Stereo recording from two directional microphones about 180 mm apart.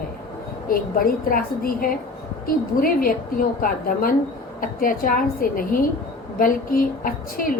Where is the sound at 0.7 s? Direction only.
55° left (ahead or behind).